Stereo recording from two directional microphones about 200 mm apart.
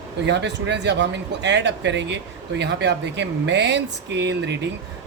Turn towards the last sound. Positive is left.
turn(degrees=-60)  # may be behind; listen again after turning